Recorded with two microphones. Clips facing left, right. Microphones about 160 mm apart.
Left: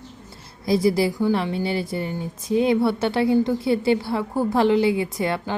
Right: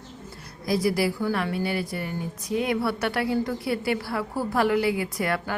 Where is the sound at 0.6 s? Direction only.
25° left (ahead or behind).